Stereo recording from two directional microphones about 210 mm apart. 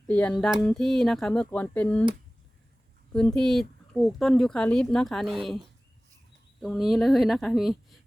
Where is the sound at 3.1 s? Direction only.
5° left (ahead or behind).